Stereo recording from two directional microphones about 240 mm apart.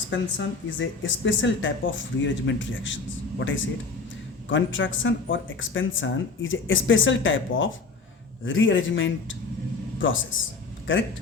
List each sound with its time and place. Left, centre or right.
0.1 s speech: left